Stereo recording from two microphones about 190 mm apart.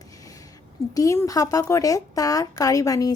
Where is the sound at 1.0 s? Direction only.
15° left (ahead or behind).